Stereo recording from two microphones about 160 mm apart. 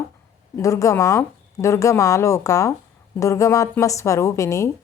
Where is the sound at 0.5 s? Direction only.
20° left (ahead or behind).